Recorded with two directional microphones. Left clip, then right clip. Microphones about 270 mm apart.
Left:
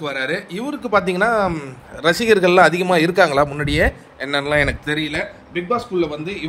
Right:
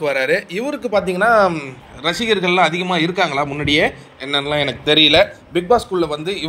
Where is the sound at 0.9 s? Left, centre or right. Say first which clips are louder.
Right 2 dB; centre.